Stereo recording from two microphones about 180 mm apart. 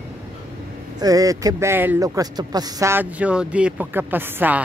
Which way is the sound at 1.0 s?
20° right (ahead or behind).